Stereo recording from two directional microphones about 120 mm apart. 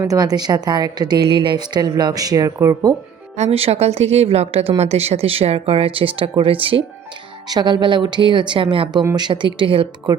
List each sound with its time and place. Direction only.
0.0 s a woman's voice: 30° right (ahead or behind)
3.3 s a woman's voice: 60° right (ahead or behind)
7.4 s a woman's voice: 35° right (ahead or behind)